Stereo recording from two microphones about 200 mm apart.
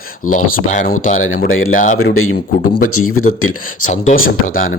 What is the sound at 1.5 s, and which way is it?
Speech, 90° left.